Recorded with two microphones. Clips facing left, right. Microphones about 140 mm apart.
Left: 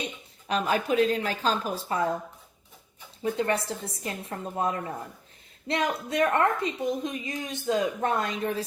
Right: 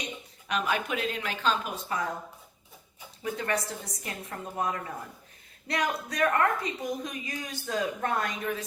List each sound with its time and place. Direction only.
0.0 s speech: 35° left (ahead or behind)
3.3 s a woman's voice: 30° left (ahead or behind)